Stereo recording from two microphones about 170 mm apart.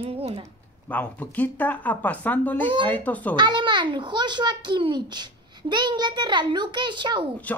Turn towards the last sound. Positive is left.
turn(degrees=-25)  # may be behind; listen again after turning